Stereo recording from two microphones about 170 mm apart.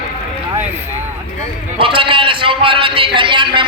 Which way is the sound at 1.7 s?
30° right (ahead or behind).